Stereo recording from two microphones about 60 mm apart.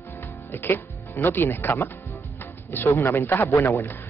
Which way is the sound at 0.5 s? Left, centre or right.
Left.